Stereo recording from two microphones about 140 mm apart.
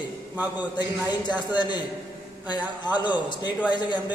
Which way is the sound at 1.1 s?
30° left (ahead or behind).